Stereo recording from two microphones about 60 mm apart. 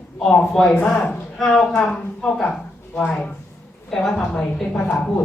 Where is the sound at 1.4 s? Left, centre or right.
Centre; by 3.3 s left.